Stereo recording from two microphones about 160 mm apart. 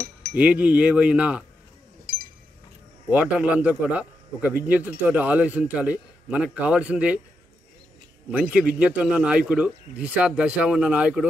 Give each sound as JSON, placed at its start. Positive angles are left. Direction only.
{"t": 0.3, "sound": "speech", "side_deg": -10}
{"t": 2.1, "sound": "chink", "side_deg": -70}
{"t": 3.1, "sound": "speech", "side_deg": -10}
{"t": 8.3, "sound": "speech", "side_deg": -5}